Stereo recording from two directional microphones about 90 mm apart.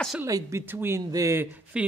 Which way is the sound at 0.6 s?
25° right (ahead or behind).